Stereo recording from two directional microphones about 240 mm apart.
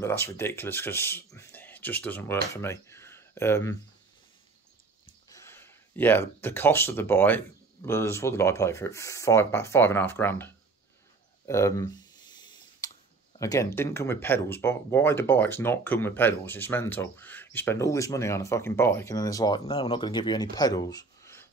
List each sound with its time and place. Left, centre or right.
0.0 s speech: centre
5.3 s speech: centre
11.4 s clicking: centre
13.4 s speech: centre